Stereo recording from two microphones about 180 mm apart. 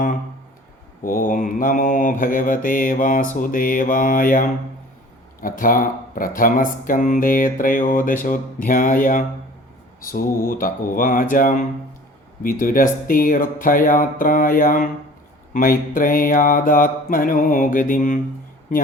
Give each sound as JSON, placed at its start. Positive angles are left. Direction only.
{"t": 1.0, "sound": "speech", "side_deg": 50}